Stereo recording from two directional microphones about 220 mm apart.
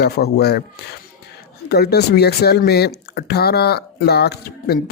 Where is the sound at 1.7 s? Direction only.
45° left (ahead or behind).